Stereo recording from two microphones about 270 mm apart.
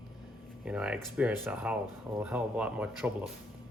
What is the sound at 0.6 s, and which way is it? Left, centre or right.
Speech, centre.